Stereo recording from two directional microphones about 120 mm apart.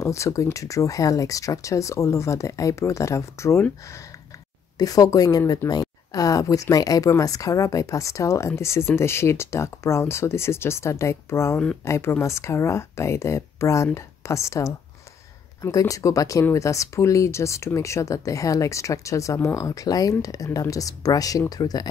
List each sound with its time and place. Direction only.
0.0 s speech: 25° left (ahead or behind)
4.7 s a woman's voice: 30° left (ahead or behind)